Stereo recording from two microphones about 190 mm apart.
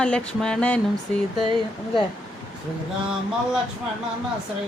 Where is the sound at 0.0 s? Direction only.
5° left (ahead or behind).